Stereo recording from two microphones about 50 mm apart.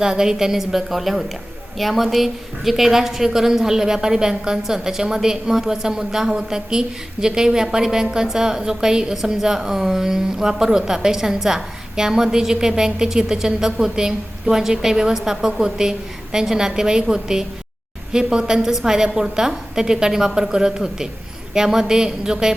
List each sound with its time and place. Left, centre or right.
0.0 s a woman's voice: centre